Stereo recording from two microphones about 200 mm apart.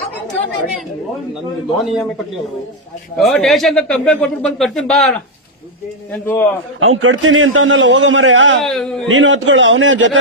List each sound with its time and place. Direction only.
1.8 s speech: centre (ahead or behind)
3.2 s a man's voice: centre (ahead or behind)
6.7 s a man's voice: 85° right; by 8.5 s 70° right (ahead or behind)
8.6 s speech: centre (ahead or behind)
9.0 s a man's voice: 75° right (ahead or behind)